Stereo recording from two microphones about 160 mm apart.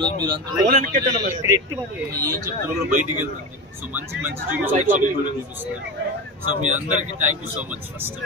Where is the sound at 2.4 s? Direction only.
15° right (ahead or behind).